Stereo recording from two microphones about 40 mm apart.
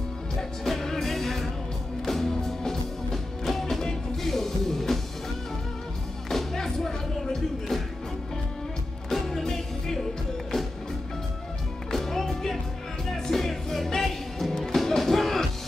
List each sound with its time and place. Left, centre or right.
0.4 s music: centre
6.3 s music: centre
9.1 s music: centre
11.9 s music: centre